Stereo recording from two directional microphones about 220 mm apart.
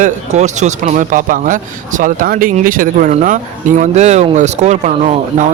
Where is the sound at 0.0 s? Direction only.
30° right (ahead or behind).